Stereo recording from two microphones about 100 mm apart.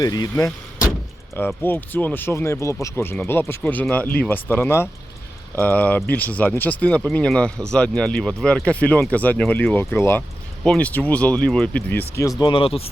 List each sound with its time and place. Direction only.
0.0 s speech: 40° left (ahead or behind)
1.6 s speech: 20° left (ahead or behind)
10.6 s speech: 10° left (ahead or behind)
12.4 s speech: 60° left (ahead or behind)